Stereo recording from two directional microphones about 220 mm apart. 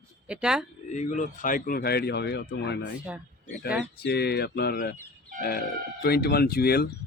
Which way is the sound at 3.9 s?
50° left (ahead or behind).